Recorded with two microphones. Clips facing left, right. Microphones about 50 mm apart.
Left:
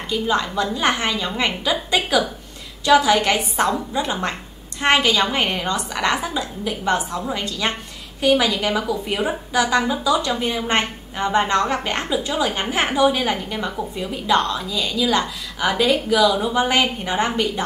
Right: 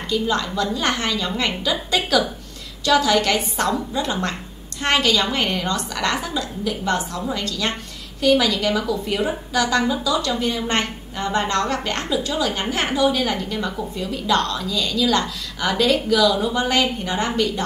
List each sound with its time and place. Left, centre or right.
0.1 s a woman's voice: centre